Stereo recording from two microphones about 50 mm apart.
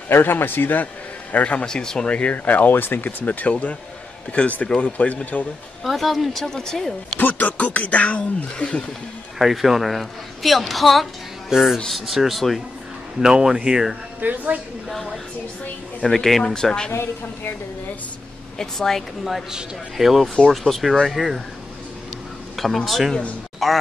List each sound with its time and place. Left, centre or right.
0.1 s speech: left
1.3 s speech: left
1.7 s speech: centre; by 5.5 s left
5.9 s speech: centre
7.2 s speech: left
9.4 s speech: centre
13.2 s speech: centre
14.2 s a woman's voice: right
14.9 s speech: centre
16.9 s a woman's voice: left
18.6 s speech: centre
20.0 s speech: centre
22.6 s speech: centre